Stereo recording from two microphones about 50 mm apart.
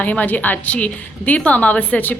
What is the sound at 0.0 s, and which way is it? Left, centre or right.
A woman's voice, left.